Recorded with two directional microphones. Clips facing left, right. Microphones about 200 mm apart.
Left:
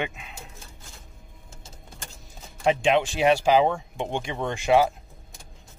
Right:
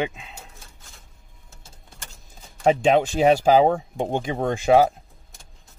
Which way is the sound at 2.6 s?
40° right (ahead or behind).